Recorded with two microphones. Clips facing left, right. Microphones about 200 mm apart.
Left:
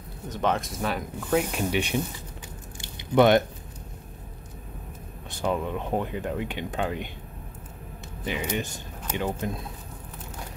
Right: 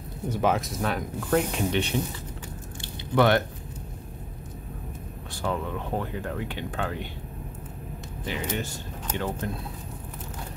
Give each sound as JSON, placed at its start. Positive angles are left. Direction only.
{"t": 0.3, "sound": "speech", "side_deg": -5}
{"t": 2.8, "sound": "squish", "side_deg": 20}
{"t": 5.3, "sound": "speech", "side_deg": 20}
{"t": 8.3, "sound": "speech", "side_deg": 15}